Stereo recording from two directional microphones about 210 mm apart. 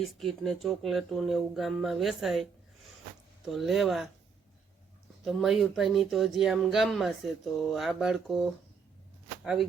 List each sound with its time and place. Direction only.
0.0 s speech: centre (ahead or behind)
5.2 s speech: centre (ahead or behind)